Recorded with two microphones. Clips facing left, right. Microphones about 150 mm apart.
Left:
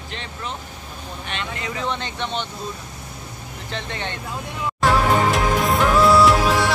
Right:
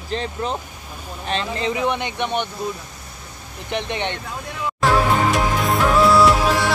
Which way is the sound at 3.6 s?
15° right (ahead or behind).